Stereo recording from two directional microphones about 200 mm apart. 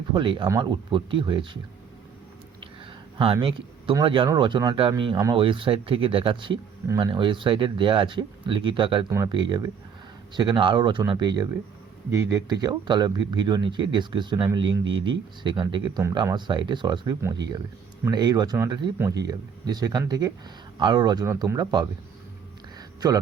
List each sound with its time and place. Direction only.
0.1 s speech: 25° right (ahead or behind)
3.4 s speech: 25° right (ahead or behind)